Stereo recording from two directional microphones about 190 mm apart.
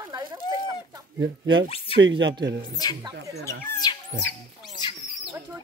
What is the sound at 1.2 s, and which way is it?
Speech, 75° right (ahead or behind).